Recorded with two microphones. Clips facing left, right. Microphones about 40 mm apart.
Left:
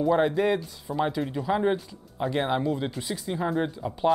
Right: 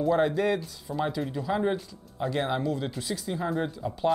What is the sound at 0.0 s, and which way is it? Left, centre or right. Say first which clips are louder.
Speech: left 2 dB; centre.